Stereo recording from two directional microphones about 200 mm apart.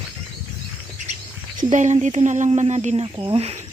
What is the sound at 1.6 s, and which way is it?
Speech, 35° right (ahead or behind).